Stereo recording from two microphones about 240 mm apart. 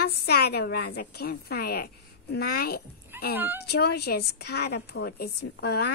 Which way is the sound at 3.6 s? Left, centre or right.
Left.